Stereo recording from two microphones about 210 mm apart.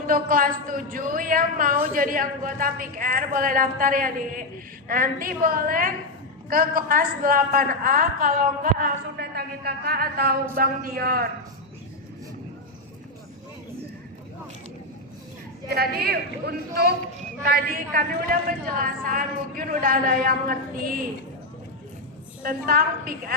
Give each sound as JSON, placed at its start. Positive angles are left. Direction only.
{"t": 0.1, "sound": "a woman's voice", "side_deg": -40}
{"t": 15.7, "sound": "a man's voice", "side_deg": -50}
{"t": 22.4, "sound": "a man's voice", "side_deg": -40}